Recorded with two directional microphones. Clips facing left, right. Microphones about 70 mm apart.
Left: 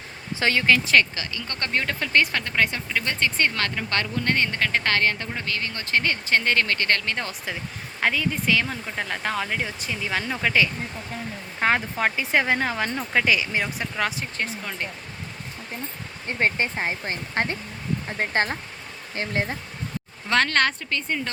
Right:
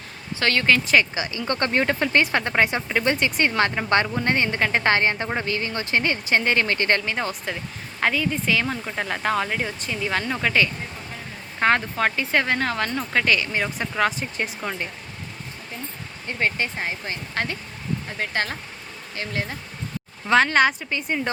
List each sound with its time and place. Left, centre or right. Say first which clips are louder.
0.3 s speech: even; centre
0.6 s speech: even; centre
1.1 s speech: right 7 dB; centre
7.0 s a woman's voice: right 3 dB; centre
16.2 s speech: left 1 dB; left
20.2 s a woman's voice: right 4 dB; centre